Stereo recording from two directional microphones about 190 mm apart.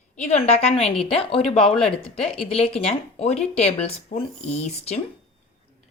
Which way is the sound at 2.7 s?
30° left (ahead or behind).